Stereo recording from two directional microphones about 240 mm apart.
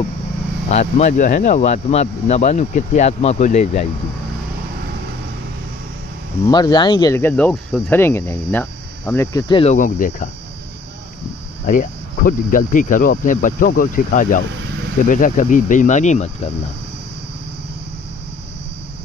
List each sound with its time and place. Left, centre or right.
0.7 s speech: left
6.4 s speech: centre; by 10.3 s left
11.6 s speech: left